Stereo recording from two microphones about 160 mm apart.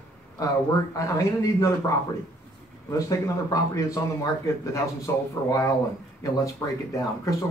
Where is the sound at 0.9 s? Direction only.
20° left (ahead or behind).